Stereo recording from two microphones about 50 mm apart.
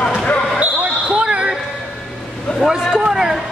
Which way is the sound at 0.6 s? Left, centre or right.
Centre.